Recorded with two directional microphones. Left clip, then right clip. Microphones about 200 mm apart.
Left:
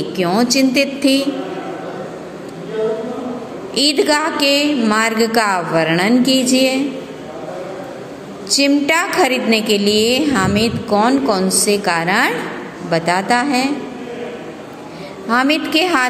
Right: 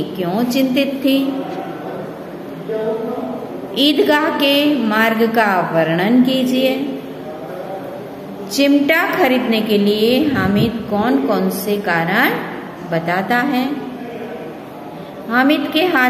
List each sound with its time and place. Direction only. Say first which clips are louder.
0.2 s a woman's voice: left 4 dB; 35° left (ahead or behind)
3.8 s a woman's voice: right 1 dB; 30° left (ahead or behind)
8.5 s a woman's voice: right 1 dB; 35° left (ahead or behind)
15.2 s a woman's voice: even; 35° left (ahead or behind)